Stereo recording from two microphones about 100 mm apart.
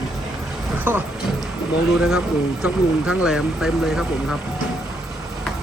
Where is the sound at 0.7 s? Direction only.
20° right (ahead or behind).